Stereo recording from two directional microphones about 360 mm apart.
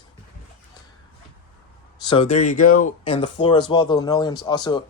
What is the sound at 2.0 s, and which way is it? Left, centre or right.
Speech, centre.